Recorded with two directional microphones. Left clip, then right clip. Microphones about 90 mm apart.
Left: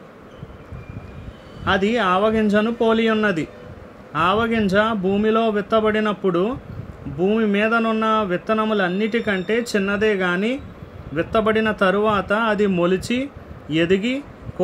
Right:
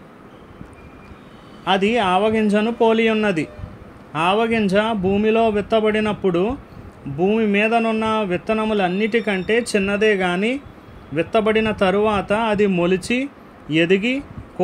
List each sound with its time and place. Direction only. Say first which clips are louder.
1.6 s a man's voice: right 1 dB; 30° right (ahead or behind)